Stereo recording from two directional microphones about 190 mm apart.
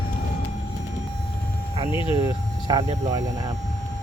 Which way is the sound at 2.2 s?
20° right (ahead or behind).